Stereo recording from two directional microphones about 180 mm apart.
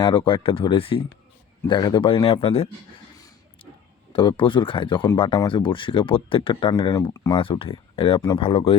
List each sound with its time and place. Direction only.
0.0 s speech: 25° left (ahead or behind)
3.2 s a sound: 20° left (ahead or behind)
4.1 s speech: 30° left (ahead or behind)